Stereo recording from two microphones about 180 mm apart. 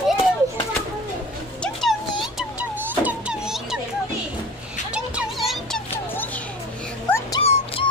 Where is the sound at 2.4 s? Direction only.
10° right (ahead or behind).